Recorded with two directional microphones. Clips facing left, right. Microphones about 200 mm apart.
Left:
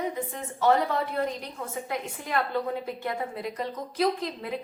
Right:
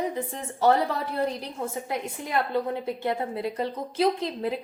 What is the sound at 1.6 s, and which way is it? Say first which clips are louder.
Speech: right 7 dB; 30° right (ahead or behind).